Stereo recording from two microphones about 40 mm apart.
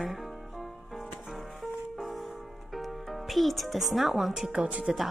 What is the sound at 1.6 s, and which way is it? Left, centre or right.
Music, centre.